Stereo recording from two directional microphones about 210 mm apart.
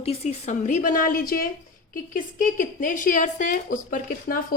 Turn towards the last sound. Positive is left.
turn(degrees=40)  # may be behind; listen again after turning